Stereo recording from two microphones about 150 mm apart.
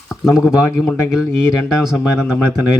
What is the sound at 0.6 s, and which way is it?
Speech, 15° left (ahead or behind).